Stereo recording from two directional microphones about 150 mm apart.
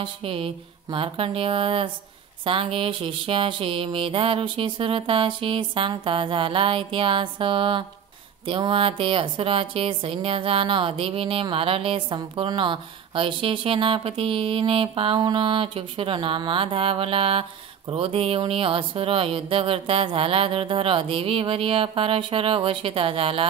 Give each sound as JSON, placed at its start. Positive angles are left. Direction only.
{"t": 0.0, "sound": "a woman's voice", "side_deg": -40}